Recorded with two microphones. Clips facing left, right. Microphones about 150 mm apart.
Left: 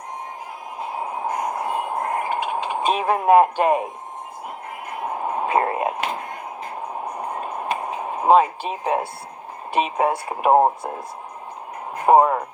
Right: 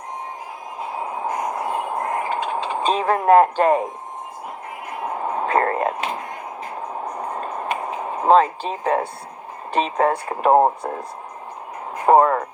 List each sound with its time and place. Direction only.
1.2 s a sound: 10° left (ahead or behind)
5.0 s radio: 10° left (ahead or behind)
7.0 s train: 10° left (ahead or behind)
7.8 s a sound: 10° left (ahead or behind)
9.7 s speech: 10° left (ahead or behind)
12.0 s speech: 10° left (ahead or behind)